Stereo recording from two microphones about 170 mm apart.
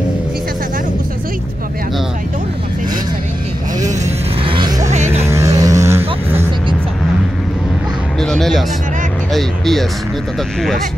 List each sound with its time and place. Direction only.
4.0 s a sound: 30° right (ahead or behind)
4.8 s vehicle: 45° right (ahead or behind)
5.2 s vehicle: 15° right (ahead or behind)
8.2 s music: centre (ahead or behind)
9.3 s speech: centre (ahead or behind)